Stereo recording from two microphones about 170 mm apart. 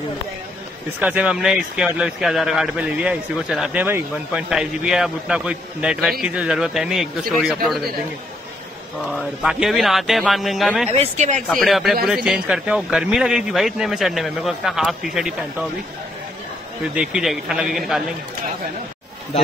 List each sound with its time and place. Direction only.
1.0 s speech: 5° right (ahead or behind)
9.1 s speech: 5° right (ahead or behind)
11.0 s speech: 45° right (ahead or behind)
11.4 s speech: centre (ahead or behind)
16.9 s speech: 5° right (ahead or behind)